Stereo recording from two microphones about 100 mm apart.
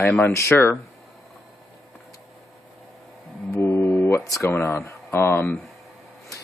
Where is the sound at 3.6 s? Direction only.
25° left (ahead or behind).